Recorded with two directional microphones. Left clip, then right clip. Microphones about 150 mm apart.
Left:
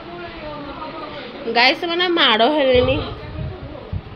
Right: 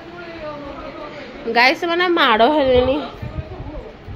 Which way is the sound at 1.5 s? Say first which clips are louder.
Right 1 dB; 20° right (ahead or behind).